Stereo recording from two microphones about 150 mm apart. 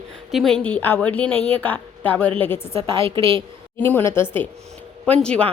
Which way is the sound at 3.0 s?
35° right (ahead or behind).